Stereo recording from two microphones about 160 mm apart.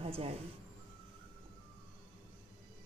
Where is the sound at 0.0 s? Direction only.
40° right (ahead or behind).